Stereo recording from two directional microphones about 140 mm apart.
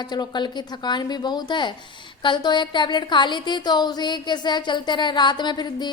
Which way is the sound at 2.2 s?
35° left (ahead or behind).